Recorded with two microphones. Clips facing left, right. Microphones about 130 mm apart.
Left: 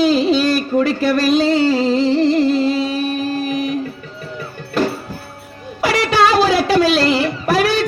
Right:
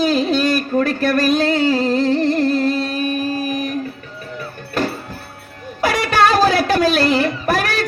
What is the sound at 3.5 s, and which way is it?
Music, 50° right (ahead or behind).